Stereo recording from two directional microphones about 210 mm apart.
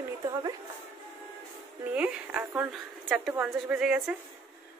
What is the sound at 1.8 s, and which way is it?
Speech, 5° right (ahead or behind).